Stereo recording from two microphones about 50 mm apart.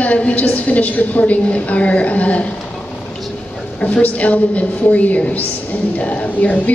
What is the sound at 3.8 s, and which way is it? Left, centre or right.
A woman's voice, left.